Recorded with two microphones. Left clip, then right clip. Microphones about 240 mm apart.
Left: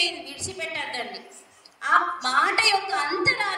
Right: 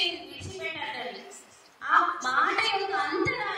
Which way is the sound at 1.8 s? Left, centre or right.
Left.